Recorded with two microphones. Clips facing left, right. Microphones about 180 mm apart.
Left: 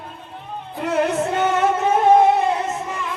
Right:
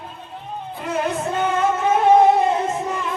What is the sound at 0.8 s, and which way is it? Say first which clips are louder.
Music: left 4 dB; 70° left (ahead or behind).